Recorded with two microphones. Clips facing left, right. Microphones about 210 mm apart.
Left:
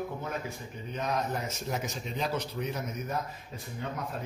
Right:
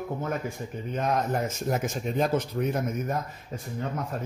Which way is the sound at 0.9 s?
50° right (ahead or behind).